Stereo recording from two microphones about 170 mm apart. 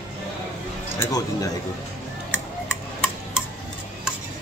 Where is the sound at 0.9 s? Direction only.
20° left (ahead or behind).